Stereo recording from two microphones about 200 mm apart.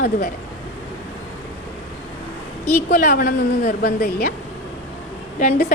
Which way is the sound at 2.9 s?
50° left (ahead or behind).